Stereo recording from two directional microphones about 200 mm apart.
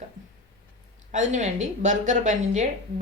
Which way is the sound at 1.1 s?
35° right (ahead or behind).